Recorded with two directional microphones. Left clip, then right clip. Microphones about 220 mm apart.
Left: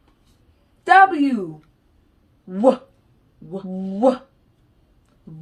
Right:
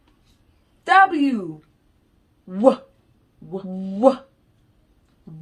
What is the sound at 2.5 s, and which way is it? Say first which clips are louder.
Dog: even; 15° right (ahead or behind).